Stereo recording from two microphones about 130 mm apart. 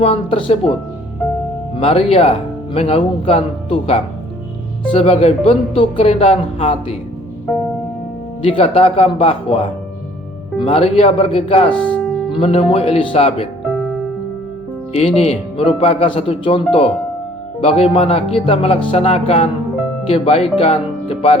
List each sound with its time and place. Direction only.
0.0 s speech: 45° left (ahead or behind)
1.8 s speech: 50° left (ahead or behind)
8.4 s speech: 45° left (ahead or behind)
11.7 s music: 10° left (ahead or behind)
12.3 s speech: 45° left (ahead or behind)
14.9 s speech: 50° left (ahead or behind)